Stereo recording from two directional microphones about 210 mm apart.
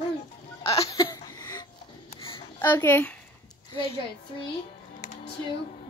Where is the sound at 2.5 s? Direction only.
10° left (ahead or behind).